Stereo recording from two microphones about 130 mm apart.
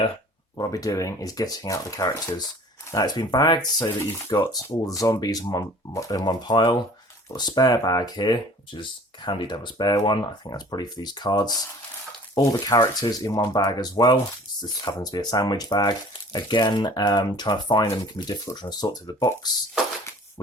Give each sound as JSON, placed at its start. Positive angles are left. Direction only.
{"t": 0.5, "sound": "speech", "side_deg": 30}